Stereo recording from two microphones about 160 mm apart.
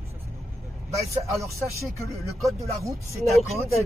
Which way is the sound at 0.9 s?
20° right (ahead or behind).